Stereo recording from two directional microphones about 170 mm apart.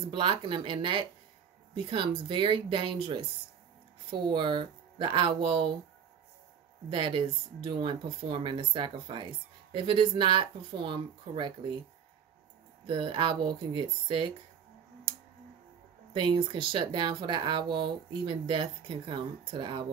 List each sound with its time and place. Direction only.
0.1 s speech: 25° right (ahead or behind)
6.9 s speech: 30° right (ahead or behind)
12.8 s speech: 30° right (ahead or behind)
16.1 s speech: 30° right (ahead or behind)